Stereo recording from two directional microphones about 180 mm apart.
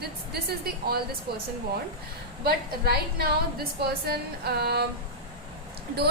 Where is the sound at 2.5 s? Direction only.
60° right (ahead or behind).